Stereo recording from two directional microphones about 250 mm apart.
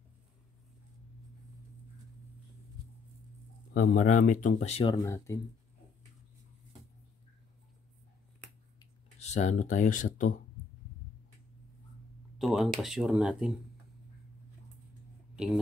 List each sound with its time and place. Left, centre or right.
3.7 s speech: left; by 5.4 s centre
9.2 s speech: left
12.4 s speech: centre
15.3 s speech: centre